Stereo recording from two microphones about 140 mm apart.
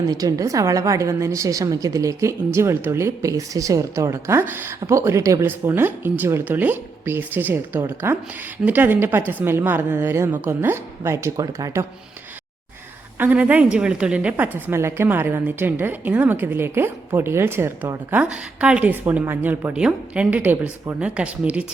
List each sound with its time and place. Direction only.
0.1 s a woman's voice: 25° right (ahead or behind)
13.1 s a woman's voice: 10° right (ahead or behind)